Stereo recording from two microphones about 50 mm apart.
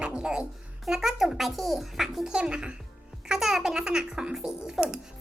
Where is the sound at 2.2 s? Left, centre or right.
Centre.